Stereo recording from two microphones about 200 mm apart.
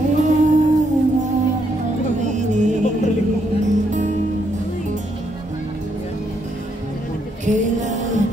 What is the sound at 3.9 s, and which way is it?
Music, 35° right (ahead or behind).